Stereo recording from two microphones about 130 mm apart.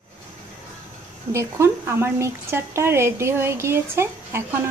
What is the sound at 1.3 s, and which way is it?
Speech, 20° right (ahead or behind).